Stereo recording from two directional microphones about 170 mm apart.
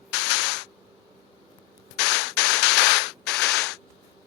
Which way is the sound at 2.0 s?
90° left.